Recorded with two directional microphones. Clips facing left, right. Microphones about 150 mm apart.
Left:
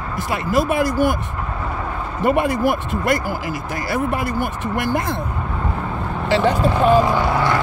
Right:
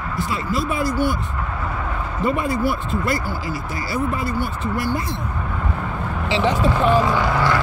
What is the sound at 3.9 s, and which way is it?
Speech, 75° left (ahead or behind).